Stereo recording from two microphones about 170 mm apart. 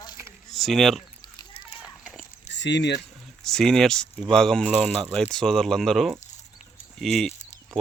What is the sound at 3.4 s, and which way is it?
Speech, 5° left (ahead or behind).